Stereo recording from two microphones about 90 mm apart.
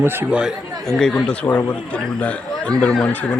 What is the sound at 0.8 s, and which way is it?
Speech, 5° left (ahead or behind).